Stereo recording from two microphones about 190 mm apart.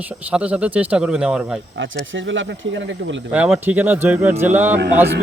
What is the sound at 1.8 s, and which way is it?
Speech, 80° right.